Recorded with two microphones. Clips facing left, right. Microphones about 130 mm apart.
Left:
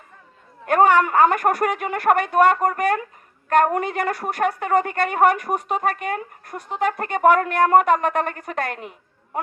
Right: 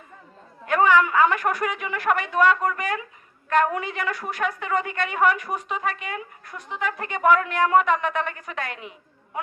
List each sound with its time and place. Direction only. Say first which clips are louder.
0.6 s a woman's voice: left 3 dB; 50° left (ahead or behind)